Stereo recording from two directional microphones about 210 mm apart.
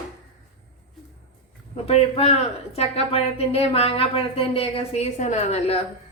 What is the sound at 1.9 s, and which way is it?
A woman's voice, 30° left (ahead or behind).